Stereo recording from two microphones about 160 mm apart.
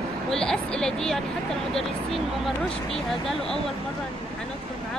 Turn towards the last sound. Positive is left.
turn(degrees=0)  # may be behind; listen again after turning